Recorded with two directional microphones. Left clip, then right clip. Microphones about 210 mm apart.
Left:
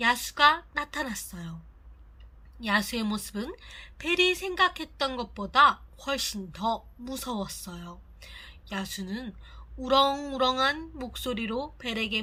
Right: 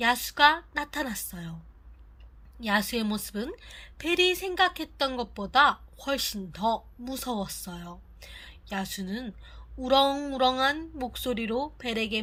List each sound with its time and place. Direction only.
0.0 s a woman's voice: 25° right (ahead or behind)
2.6 s a woman's voice: 25° right (ahead or behind)